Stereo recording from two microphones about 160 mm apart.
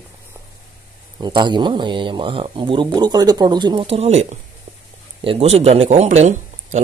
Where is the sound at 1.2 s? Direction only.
30° right (ahead or behind).